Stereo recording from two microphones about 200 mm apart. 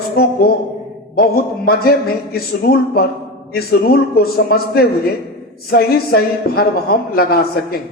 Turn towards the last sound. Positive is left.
turn(degrees=50)  # may be behind; listen again after turning